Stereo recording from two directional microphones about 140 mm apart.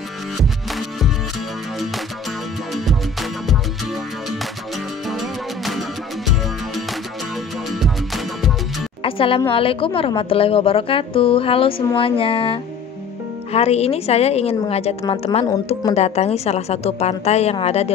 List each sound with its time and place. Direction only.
0.7 s music: centre (ahead or behind)
2.7 s music: centre (ahead or behind)
7.7 s music: centre (ahead or behind)
9.0 s music: 40° left (ahead or behind)
9.5 s a woman's voice: 40° left (ahead or behind)